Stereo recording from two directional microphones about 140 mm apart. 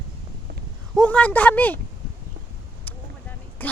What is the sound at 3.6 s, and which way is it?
Speech, 15° left (ahead or behind).